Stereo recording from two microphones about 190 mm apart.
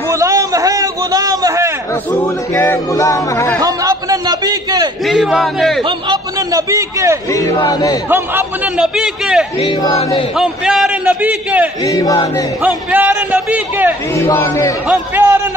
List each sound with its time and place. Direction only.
0.1 s a sound: 15° right (ahead or behind)
2.2 s speech: 10° left (ahead or behind)
3.6 s a sound: 20° right (ahead or behind)
5.0 s a man's voice: centre (ahead or behind)
5.9 s a man's voice: 20° right (ahead or behind)
7.2 s speech: 15° left (ahead or behind)
8.1 s a man's voice: 5° right (ahead or behind)
9.6 s speech: 25° left (ahead or behind)
10.3 s a man's voice: 5° right (ahead or behind)
11.8 s speech: 20° left (ahead or behind)
12.6 s a man's voice: 10° right (ahead or behind)
14.1 s speech: 15° left (ahead or behind)
14.9 s a man's voice: 10° right (ahead or behind)